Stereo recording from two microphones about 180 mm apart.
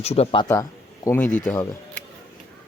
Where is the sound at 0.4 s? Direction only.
20° left (ahead or behind).